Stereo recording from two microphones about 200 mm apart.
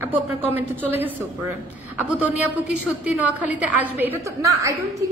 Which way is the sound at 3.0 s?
5° right (ahead or behind).